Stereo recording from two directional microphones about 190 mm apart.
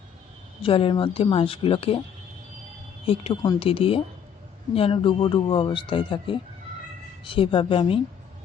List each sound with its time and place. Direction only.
0.6 s speech: 30° left (ahead or behind)
3.1 s speech: 25° left (ahead or behind)